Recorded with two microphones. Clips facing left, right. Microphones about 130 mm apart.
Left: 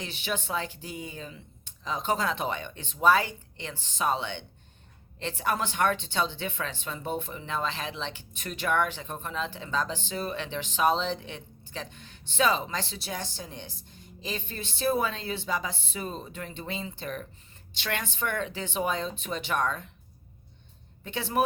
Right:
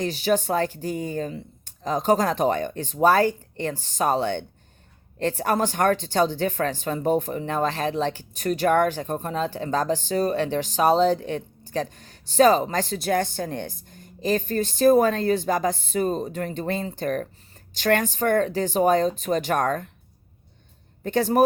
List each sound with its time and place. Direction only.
0.0 s speech: 40° right (ahead or behind)
21.0 s speech: 45° right (ahead or behind)